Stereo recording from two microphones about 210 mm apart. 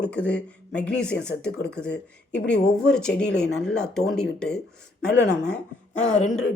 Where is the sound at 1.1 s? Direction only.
55° left (ahead or behind).